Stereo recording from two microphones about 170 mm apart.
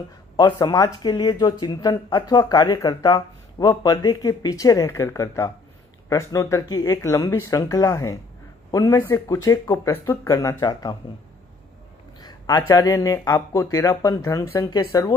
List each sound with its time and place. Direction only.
0.4 s speech: 25° left (ahead or behind)
12.2 s speech: 25° left (ahead or behind)